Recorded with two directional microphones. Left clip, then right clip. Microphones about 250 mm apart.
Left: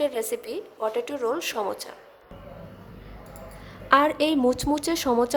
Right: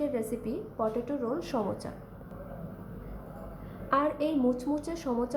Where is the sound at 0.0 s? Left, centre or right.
Left.